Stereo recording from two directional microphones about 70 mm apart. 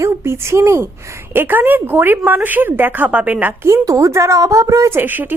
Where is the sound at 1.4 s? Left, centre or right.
Right.